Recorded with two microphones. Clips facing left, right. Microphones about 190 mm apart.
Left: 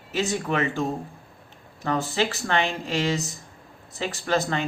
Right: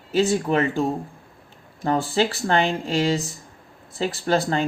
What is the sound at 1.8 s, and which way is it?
Speech, 35° right (ahead or behind).